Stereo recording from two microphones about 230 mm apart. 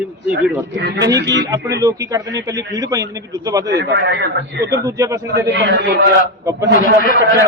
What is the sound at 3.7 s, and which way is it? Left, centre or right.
Speech, right.